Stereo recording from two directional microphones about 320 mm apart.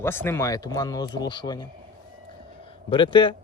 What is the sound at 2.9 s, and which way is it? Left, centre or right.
Speech, centre.